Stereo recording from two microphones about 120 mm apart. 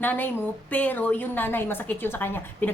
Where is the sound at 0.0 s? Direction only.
15° left (ahead or behind).